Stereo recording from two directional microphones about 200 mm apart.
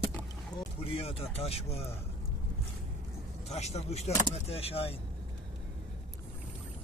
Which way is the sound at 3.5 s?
35° left (ahead or behind).